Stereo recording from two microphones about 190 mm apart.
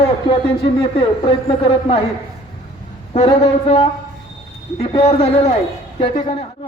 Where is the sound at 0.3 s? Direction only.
30° left (ahead or behind).